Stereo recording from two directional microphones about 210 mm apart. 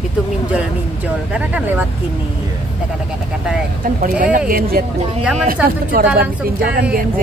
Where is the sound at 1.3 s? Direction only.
5° right (ahead or behind).